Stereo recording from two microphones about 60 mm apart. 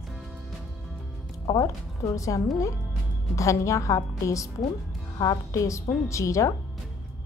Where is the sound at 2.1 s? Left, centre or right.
Left.